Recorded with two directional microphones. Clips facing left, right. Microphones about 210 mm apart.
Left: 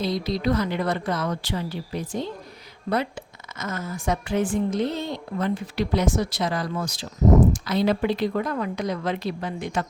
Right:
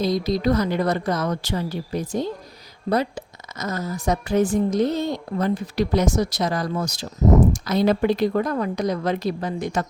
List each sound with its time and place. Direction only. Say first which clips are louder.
0.0 s a woman's voice: right 4 dB; 40° right (ahead or behind)